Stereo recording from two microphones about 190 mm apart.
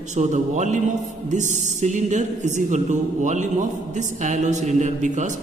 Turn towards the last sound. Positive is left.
turn(degrees=-40)  # may be behind; listen again after turning